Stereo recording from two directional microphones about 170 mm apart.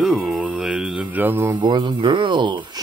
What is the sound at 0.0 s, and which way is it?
Music, centre (ahead or behind).